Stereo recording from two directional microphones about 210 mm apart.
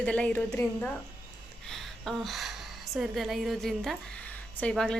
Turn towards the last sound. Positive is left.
turn(degrees=5)  # may be behind; listen again after turning